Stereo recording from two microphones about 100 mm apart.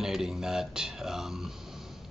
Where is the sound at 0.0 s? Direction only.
5° right (ahead or behind).